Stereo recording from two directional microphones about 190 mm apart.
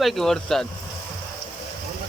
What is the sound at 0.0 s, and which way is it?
Speech, centre (ahead or behind).